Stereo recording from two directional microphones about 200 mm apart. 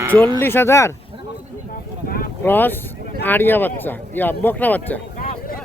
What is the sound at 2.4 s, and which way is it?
A man's voice, 10° left (ahead or behind).